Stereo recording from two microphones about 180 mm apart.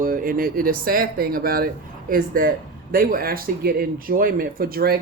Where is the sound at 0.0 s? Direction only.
50° right (ahead or behind).